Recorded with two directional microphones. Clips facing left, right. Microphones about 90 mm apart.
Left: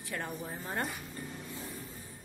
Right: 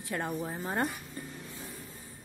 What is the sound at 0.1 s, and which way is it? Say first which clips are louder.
Speech: right 5 dB; 25° right (ahead or behind).